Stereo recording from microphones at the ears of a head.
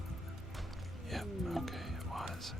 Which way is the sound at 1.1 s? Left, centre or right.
Centre.